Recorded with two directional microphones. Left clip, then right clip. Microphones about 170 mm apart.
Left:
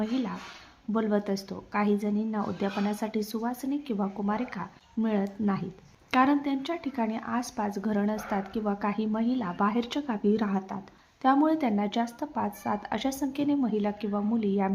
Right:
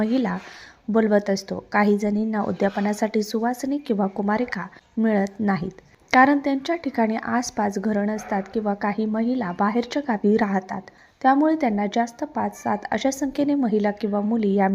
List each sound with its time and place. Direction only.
0.0 s a woman's voice: 35° right (ahead or behind)